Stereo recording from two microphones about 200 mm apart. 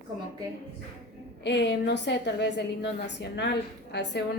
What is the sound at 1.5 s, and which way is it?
A woman's voice, 60° left (ahead or behind).